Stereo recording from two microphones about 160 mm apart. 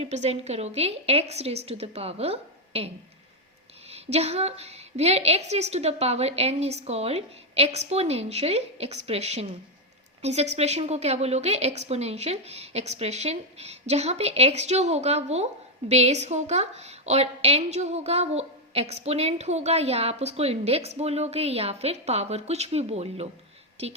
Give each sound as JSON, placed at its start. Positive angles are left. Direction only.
{"t": 0.0, "sound": "a woman's voice", "side_deg": -45}